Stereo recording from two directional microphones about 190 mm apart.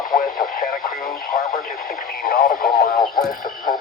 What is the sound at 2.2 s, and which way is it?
Radio, 50° left (ahead or behind).